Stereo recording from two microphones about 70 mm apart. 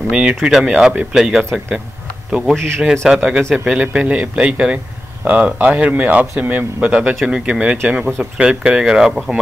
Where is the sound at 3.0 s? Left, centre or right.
Centre.